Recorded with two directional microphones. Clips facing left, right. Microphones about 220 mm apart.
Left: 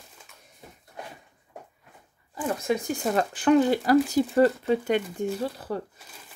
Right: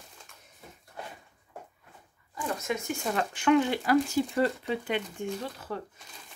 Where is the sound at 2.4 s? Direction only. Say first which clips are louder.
Left 5 dB; 30° left (ahead or behind).